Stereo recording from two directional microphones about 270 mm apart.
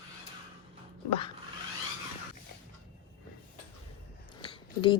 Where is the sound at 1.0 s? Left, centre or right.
Left.